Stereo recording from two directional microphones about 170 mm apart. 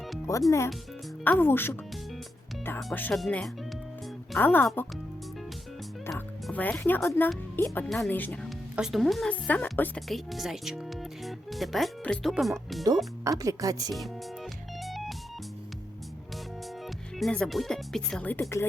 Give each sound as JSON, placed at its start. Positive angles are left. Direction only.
{"t": 0.3, "sound": "speech", "side_deg": 20}
{"t": 6.1, "sound": "speech", "side_deg": 10}
{"t": 8.4, "sound": "speech", "side_deg": 0}
{"t": 13.4, "sound": "speech", "side_deg": -20}
{"t": 14.8, "sound": "music", "side_deg": 0}
{"t": 17.2, "sound": "speech", "side_deg": 5}